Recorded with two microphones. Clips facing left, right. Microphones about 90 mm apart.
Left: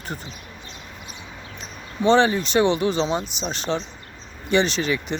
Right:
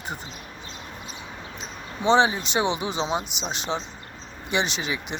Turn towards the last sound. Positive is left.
turn(degrees=-15)  # may be behind; listen again after turning